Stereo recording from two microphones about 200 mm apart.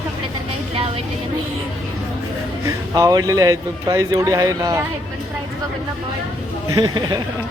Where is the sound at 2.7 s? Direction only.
15° right (ahead or behind).